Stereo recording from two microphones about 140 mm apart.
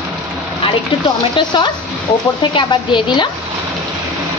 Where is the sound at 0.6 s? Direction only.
35° left (ahead or behind).